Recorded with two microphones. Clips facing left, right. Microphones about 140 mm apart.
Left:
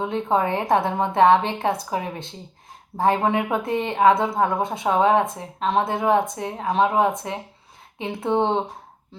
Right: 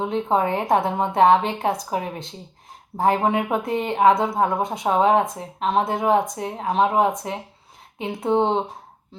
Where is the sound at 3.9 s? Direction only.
15° right (ahead or behind).